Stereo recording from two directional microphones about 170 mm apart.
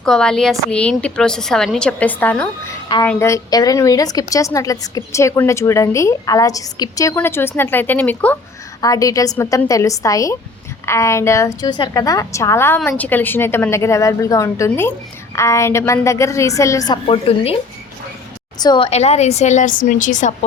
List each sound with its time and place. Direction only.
0.0 s a woman's voice: 5° left (ahead or behind)
8.8 s a woman's voice: 20° left (ahead or behind)
17.1 s a woman's voice: 35° left (ahead or behind)
18.6 s a woman's voice: 25° left (ahead or behind)
18.9 s a woman's voice: 40° left (ahead or behind)